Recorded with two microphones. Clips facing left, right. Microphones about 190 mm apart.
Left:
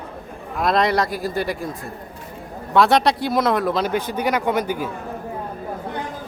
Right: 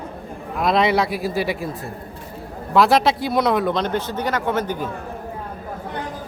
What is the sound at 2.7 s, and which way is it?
Speech, centre (ahead or behind).